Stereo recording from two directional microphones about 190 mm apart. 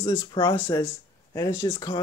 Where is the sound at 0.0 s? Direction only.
20° left (ahead or behind).